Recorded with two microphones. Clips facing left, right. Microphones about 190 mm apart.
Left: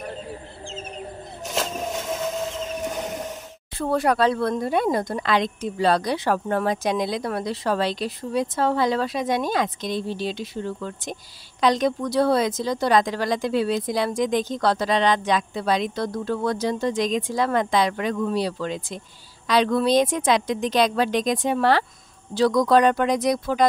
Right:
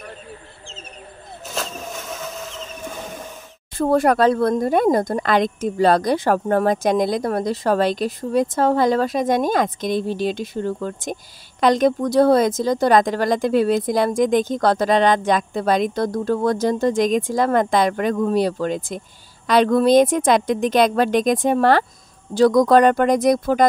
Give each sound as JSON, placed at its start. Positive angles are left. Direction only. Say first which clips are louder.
{"t": 1.5, "sound": "vehicle", "louder": "left 3 dB", "side_deg": 20}
{"t": 3.7, "sound": "speech", "louder": "right 5 dB", "side_deg": -45}